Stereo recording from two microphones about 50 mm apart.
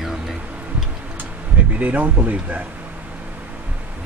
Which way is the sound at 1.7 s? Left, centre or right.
Right.